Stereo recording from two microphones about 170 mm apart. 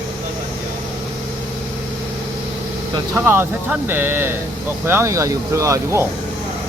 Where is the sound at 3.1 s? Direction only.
15° right (ahead or behind).